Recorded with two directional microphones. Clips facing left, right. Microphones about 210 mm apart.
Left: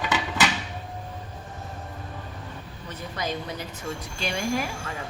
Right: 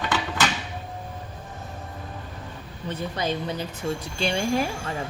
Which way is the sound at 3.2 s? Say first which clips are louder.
Right 2 dB; 30° right (ahead or behind).